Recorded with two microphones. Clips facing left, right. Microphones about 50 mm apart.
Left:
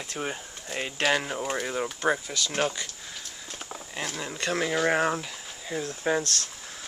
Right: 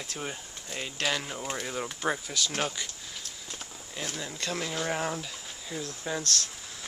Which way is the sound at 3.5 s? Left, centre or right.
Left.